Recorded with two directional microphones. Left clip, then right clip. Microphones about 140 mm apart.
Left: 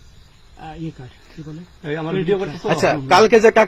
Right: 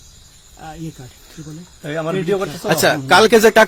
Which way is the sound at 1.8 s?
35° right (ahead or behind).